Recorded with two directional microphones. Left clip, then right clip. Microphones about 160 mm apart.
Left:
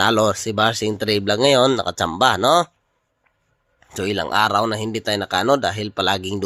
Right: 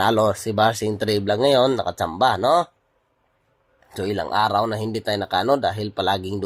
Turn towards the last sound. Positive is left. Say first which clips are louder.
# left 2 dB
turn(degrees=20)  # may be behind; listen again after turning